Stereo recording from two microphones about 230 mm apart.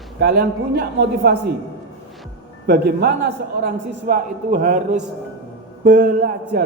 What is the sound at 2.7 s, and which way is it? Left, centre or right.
A man's voice, right.